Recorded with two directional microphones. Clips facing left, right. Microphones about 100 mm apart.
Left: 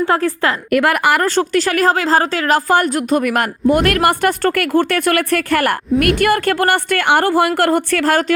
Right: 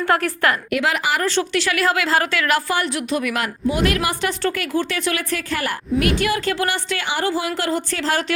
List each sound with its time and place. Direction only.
0.1 s a woman's voice: 25° left (ahead or behind)
0.7 s a woman's voice: 50° left (ahead or behind)